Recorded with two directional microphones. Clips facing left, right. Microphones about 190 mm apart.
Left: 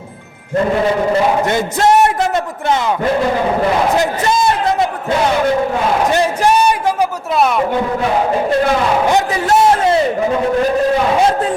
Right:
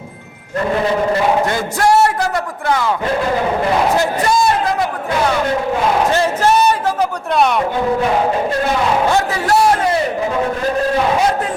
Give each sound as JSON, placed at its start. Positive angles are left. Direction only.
{"t": 1.5, "sound": "a man's voice", "side_deg": 20}
{"t": 3.9, "sound": "a man's voice", "side_deg": 20}
{"t": 6.1, "sound": "a sound", "side_deg": 15}
{"t": 7.3, "sound": "a man's voice", "side_deg": 0}
{"t": 9.0, "sound": "a man's voice", "side_deg": 20}